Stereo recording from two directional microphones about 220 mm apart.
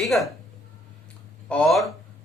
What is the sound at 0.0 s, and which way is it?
Speech, centre (ahead or behind).